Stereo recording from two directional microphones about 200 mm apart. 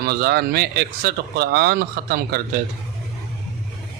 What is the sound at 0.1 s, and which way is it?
Speech, 50° right (ahead or behind).